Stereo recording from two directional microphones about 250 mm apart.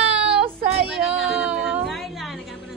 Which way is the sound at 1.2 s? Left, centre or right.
Centre.